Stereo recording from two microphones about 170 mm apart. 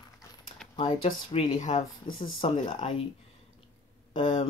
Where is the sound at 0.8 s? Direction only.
35° left (ahead or behind).